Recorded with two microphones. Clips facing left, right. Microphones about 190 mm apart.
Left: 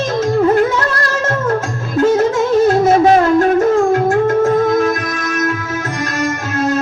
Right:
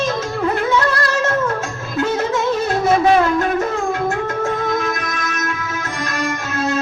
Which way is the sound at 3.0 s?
40° left (ahead or behind).